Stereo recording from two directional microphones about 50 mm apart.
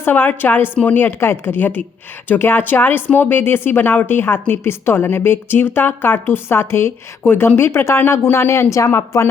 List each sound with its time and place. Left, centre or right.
0.0 s a woman's voice: left
1.2 s a woman's voice: left
3.8 s a woman's voice: left
4.0 s a woman's voice: left
8.7 s a woman's voice: left